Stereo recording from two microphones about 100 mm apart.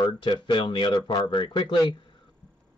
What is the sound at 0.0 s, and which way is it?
Speech, 45° left (ahead or behind).